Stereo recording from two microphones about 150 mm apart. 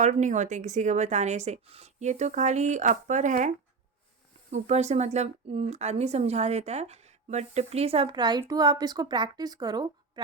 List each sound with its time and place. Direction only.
0.0 s speech: 55° right (ahead or behind)
4.5 s speech: 45° right (ahead or behind); by 9.9 s 30° right (ahead or behind)